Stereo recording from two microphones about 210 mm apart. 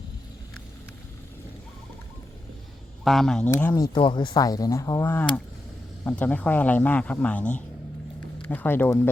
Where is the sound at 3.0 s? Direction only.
Centre (ahead or behind).